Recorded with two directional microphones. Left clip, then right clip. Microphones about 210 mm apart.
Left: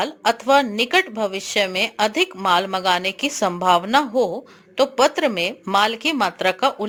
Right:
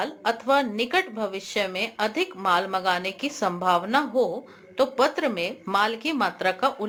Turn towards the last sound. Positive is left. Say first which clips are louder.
# left 5 dB
turn(degrees=40)  # may be behind; listen again after turning